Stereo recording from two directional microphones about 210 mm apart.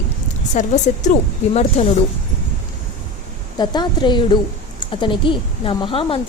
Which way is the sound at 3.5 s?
20° left (ahead or behind).